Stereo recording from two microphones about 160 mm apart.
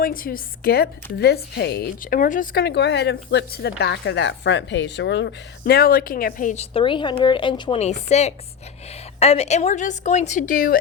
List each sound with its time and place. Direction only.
0.0 s a woman's voice: 65° left (ahead or behind)
1.2 s a woman's voice: 90° left; by 6.7 s 55° left (ahead or behind)
6.7 s speech: 30° left (ahead or behind)
7.8 s a woman's voice: 45° left (ahead or behind); by 10.8 s 60° left (ahead or behind)